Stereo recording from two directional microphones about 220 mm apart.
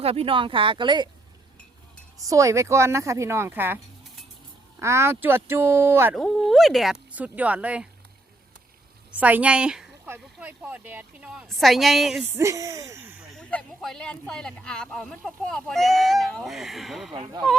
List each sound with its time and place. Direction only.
0.0 s speech: 25° right (ahead or behind)
2.1 s speech: 15° right (ahead or behind)
4.8 s speech: 10° right (ahead or behind)
9.1 s speech: 5° right (ahead or behind)
12.4 s speech: 15° right (ahead or behind)
13.4 s speech: 5° left (ahead or behind)